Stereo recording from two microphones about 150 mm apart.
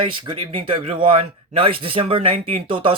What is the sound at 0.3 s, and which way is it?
Speech, 35° right (ahead or behind).